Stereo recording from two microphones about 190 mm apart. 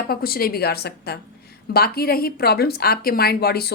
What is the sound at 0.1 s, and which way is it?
A woman's voice, 50° left (ahead or behind).